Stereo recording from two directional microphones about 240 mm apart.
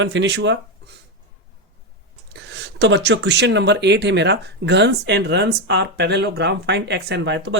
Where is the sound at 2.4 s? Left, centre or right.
Right.